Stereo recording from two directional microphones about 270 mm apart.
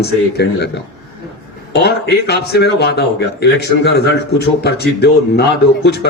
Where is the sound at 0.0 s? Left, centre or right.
Left.